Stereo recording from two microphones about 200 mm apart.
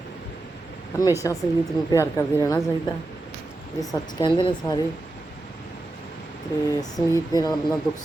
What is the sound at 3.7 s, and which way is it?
A woman's voice, 25° left (ahead or behind).